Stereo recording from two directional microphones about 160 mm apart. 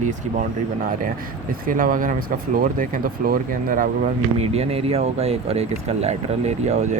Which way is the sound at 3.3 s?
60° right (ahead or behind).